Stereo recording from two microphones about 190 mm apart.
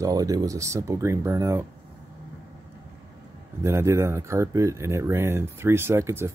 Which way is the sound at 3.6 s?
15° right (ahead or behind).